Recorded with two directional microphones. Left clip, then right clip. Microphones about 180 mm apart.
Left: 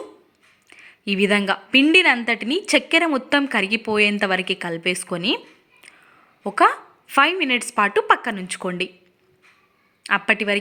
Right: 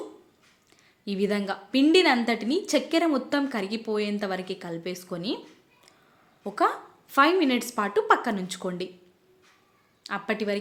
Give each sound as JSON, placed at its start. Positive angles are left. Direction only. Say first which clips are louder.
{"t": 0.7, "sound": "a woman's voice", "louder": "left 10 dB", "side_deg": 20}
{"t": 6.4, "sound": "a woman's voice", "louder": "left 8 dB", "side_deg": 20}
{"t": 10.0, "sound": "a woman's voice", "louder": "left 11 dB", "side_deg": 20}